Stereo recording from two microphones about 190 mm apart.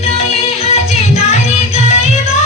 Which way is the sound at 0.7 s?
35° left (ahead or behind).